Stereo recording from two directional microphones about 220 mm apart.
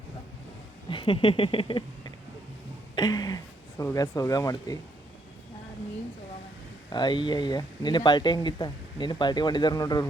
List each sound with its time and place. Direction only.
0.9 s a sound: 20° left (ahead or behind)
2.9 s speech: 20° left (ahead or behind)
6.9 s speech: 20° left (ahead or behind)